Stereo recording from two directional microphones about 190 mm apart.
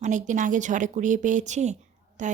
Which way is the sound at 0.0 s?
40° right (ahead or behind).